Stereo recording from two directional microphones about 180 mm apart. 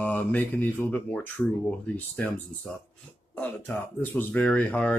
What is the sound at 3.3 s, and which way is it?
Speech, 10° left (ahead or behind).